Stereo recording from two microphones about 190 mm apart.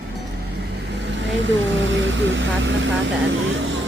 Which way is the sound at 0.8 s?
70° right (ahead or behind).